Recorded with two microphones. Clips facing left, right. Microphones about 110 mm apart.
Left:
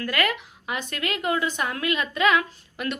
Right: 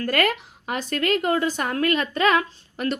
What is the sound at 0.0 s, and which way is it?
A woman's voice, 40° right (ahead or behind).